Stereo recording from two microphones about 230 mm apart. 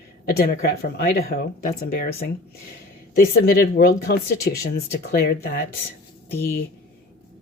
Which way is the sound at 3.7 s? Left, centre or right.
Left.